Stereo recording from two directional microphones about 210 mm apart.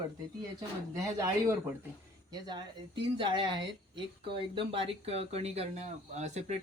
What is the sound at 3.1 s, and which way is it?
Speech, 25° right (ahead or behind).